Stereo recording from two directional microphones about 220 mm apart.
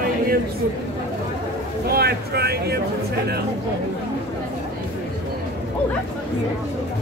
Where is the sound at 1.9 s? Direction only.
45° right (ahead or behind).